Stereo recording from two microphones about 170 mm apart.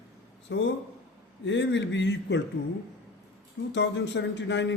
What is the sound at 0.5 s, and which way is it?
A man's voice, 90° left.